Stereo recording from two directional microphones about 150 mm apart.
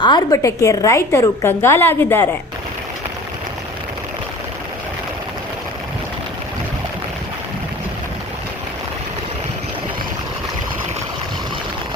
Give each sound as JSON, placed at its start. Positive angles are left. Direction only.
{"t": 0.0, "sound": "a woman's voice", "side_deg": 30}
{"t": 0.4, "sound": "a woman's voice", "side_deg": 20}